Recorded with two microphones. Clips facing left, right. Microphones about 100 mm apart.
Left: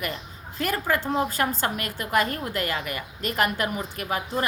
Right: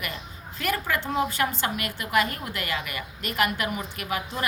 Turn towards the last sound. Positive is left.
turn(degrees=35)  # may be behind; listen again after turning